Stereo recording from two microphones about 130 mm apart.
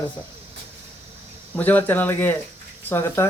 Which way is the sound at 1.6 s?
15° left (ahead or behind).